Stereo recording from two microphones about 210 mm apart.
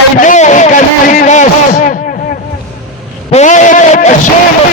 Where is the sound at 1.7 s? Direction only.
50° left (ahead or behind).